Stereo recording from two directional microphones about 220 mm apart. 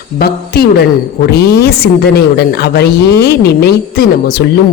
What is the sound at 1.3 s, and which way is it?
Speech, 45° left (ahead or behind).